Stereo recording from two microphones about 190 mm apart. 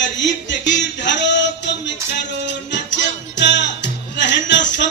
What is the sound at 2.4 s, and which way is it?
Music, 65° left (ahead or behind).